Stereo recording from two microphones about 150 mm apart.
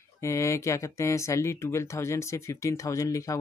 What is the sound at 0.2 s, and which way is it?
Speech, 20° left (ahead or behind).